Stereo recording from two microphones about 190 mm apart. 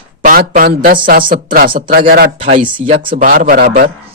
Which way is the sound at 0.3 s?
50° right (ahead or behind).